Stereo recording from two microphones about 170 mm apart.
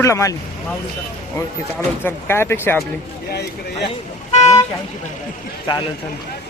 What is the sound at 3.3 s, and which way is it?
Speech, 80° left.